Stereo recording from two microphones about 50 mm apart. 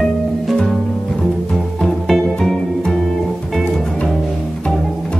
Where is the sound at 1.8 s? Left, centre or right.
Centre.